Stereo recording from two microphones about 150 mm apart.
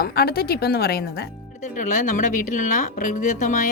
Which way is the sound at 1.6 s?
55° left (ahead or behind).